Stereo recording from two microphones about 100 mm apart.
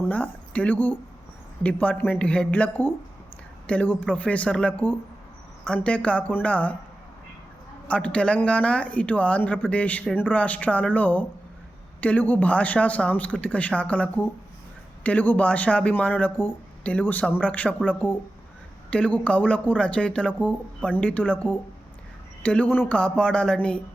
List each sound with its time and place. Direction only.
0.1 s speech: 15° left (ahead or behind)
7.9 s speech: 10° left (ahead or behind)